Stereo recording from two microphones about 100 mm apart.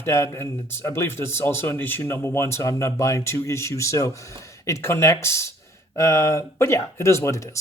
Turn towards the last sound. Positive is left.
turn(degrees=30)  # may be behind; listen again after turning